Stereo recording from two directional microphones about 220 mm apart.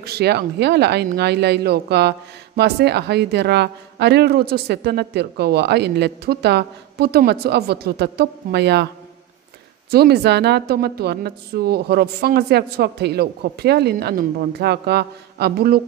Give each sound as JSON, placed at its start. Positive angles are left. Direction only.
{"t": 0.0, "sound": "speech", "side_deg": -45}
{"t": 9.8, "sound": "speech", "side_deg": -45}